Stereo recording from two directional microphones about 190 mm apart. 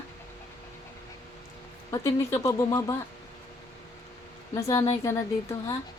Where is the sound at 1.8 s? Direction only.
15° left (ahead or behind).